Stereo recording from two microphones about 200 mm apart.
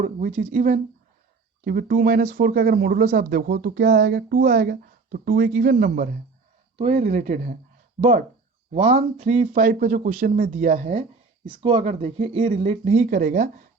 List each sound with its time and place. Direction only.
0.0 s speech: 35° right (ahead or behind)
6.7 s speech: 30° right (ahead or behind)
8.7 s speech: 35° right (ahead or behind)